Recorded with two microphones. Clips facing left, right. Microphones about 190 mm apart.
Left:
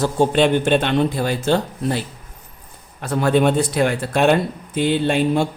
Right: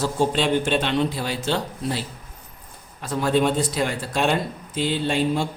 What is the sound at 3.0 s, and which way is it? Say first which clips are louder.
Speech: left 4 dB; 60° left (ahead or behind).